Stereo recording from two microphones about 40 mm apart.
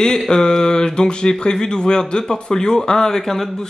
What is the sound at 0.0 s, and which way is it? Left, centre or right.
Speech, centre.